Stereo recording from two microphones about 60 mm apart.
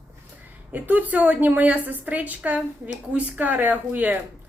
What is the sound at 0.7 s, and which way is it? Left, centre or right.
A woman's voice, right.